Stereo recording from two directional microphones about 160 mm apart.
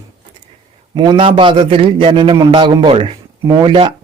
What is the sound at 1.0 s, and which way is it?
A man's voice, 30° right (ahead or behind).